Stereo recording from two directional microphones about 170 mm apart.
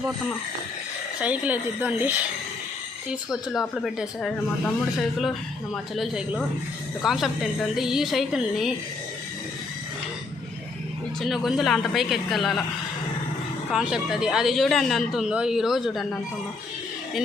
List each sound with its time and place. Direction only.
1.2 s a woman's voice: 10° right (ahead or behind)
11.2 s a woman's voice: centre (ahead or behind)
13.7 s a woman's voice: centre (ahead or behind)